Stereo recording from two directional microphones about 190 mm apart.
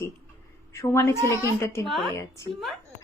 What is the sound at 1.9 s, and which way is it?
Speech, centre (ahead or behind).